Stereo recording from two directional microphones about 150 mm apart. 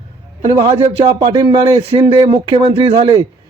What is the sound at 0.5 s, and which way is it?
Speech, 45° right (ahead or behind).